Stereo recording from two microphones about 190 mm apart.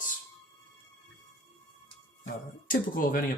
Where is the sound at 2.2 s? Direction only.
45° left (ahead or behind).